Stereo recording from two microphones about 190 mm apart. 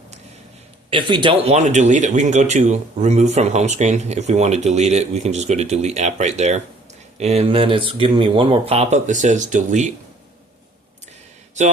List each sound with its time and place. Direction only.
0.9 s speech: 25° right (ahead or behind); by 9.9 s 40° right (ahead or behind)